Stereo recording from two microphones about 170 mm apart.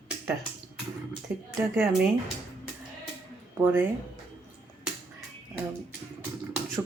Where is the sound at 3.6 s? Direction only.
10° right (ahead or behind).